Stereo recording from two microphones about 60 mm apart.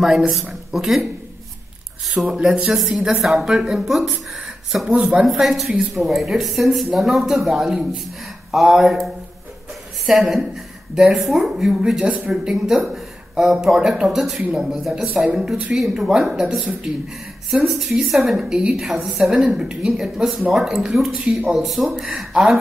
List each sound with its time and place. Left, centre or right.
0.3 s a woman's voice: centre
2.3 s a woman's voice: centre
4.8 s speech: centre
5.3 s a woman's voice: centre
10.0 s a woman's voice: centre
18.5 s a woman's voice: centre
21.1 s speech: right
21.5 s a woman's voice: centre